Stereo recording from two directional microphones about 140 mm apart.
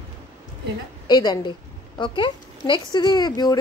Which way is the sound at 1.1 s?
30° left (ahead or behind).